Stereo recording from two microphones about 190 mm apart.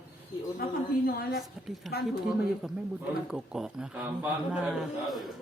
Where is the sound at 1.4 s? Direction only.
Centre (ahead or behind).